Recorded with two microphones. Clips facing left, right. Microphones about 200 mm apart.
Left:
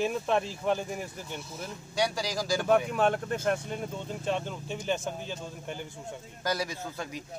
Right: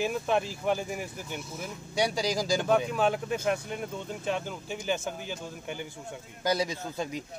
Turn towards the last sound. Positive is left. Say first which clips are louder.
# right 3 dB
turn(degrees=-20)  # may be behind; listen again after turning